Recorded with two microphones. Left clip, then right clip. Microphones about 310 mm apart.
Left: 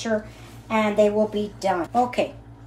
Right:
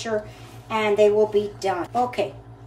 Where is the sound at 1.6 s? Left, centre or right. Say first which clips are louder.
Left 1 dB; left.